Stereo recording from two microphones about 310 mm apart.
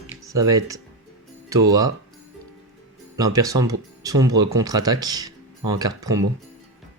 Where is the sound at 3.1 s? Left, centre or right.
Centre.